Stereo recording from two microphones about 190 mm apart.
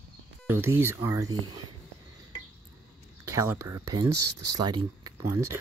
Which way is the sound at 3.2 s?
15° right (ahead or behind).